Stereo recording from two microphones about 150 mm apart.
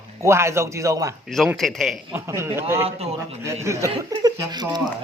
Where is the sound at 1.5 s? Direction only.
Centre (ahead or behind).